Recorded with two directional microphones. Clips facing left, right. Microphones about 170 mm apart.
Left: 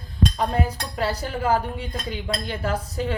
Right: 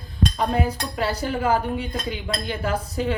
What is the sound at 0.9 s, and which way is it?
Speech, 40° left (ahead or behind).